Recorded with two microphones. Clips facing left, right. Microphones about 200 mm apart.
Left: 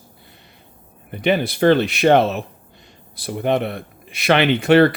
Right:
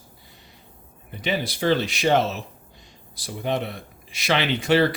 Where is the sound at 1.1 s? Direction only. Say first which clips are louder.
Left 8 dB; 60° left (ahead or behind).